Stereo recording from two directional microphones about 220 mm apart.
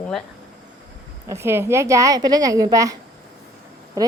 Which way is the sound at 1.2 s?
10° right (ahead or behind).